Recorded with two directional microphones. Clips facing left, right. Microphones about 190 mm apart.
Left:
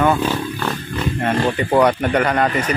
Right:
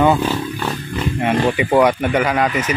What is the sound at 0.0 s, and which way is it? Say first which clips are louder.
Wild animals: right 2 dB; 15° right (ahead or behind).